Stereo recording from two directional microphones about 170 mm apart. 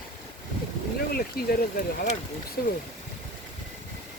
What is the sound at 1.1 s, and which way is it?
Speech, 60° left (ahead or behind).